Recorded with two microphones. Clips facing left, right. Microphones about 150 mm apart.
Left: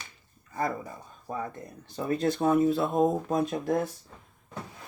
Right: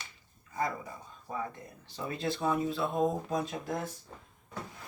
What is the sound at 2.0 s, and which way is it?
Speech, 50° left (ahead or behind).